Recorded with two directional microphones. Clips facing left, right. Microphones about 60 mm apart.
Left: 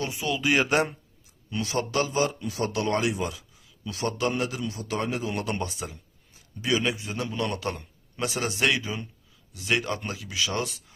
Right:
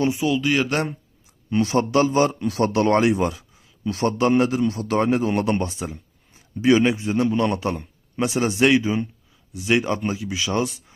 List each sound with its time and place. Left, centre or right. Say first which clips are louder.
0.2 s speech: right 7 dB; centre
0.4 s speech: right 2 dB; centre
1.5 s speech: right 8 dB; right
2.4 s speech: right 8 dB; right
2.6 s a man's voice: right 8 dB; right
4.6 s speech: right 9 dB; right
9.5 s speech: right 6 dB; centre